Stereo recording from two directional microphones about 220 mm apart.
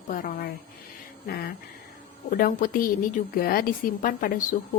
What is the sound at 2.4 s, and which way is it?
A woman's voice, 40° left (ahead or behind).